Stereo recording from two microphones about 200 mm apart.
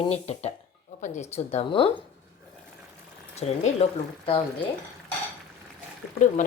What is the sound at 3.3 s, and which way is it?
Speech, 30° left (ahead or behind).